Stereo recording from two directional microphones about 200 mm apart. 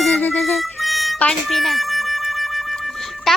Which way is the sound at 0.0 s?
5° left (ahead or behind).